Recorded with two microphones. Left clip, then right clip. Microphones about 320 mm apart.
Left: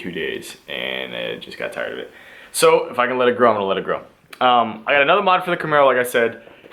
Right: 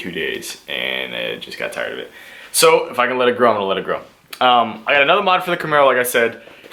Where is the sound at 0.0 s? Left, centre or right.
Centre.